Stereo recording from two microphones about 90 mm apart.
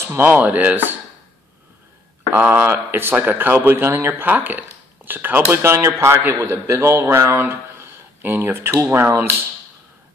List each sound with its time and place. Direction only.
0.2 s speech: 15° right (ahead or behind)
2.3 s speech: 20° right (ahead or behind)